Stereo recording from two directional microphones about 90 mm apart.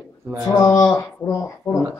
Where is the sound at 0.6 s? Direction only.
35° left (ahead or behind).